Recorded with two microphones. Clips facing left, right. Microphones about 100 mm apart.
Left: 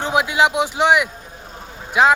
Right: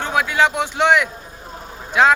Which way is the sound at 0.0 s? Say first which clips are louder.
Left 1 dB; 15° left (ahead or behind).